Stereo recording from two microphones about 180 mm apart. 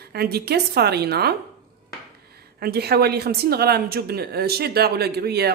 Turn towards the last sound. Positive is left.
turn(degrees=-60)  # may be behind; listen again after turning